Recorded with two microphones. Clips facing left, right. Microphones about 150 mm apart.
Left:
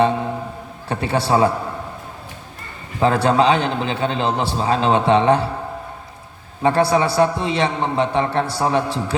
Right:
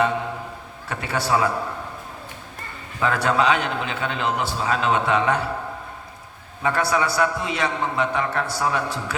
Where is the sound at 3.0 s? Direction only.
30° left (ahead or behind).